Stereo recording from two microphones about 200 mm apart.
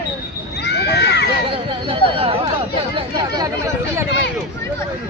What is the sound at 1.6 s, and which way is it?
Speech, 25° right (ahead or behind).